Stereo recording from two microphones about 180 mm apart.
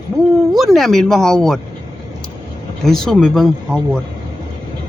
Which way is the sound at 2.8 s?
Centre (ahead or behind).